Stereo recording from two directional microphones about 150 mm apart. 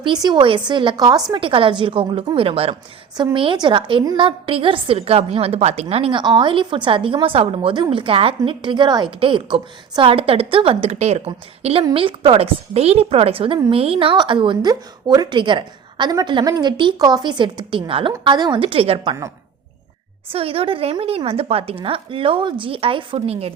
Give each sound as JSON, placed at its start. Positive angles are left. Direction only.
{"t": 0.0, "sound": "a woman's voice", "side_deg": -30}
{"t": 20.3, "sound": "a woman's voice", "side_deg": -40}